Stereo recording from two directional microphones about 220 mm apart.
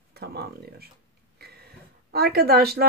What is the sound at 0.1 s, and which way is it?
Speech, 45° right (ahead or behind).